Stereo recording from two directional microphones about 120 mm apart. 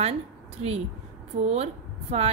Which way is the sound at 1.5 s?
60° right (ahead or behind).